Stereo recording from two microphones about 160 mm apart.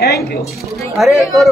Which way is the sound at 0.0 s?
90° left.